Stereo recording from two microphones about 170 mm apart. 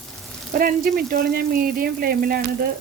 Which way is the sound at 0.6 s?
60° right (ahead or behind).